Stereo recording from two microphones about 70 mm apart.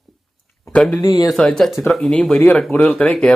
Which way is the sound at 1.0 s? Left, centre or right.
Left.